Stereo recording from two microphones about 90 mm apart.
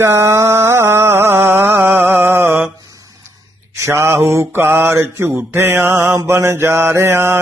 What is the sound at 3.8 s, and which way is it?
Mantra, 30° right (ahead or behind).